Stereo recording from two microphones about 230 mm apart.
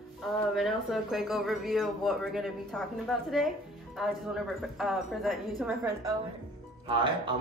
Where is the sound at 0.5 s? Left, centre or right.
Centre.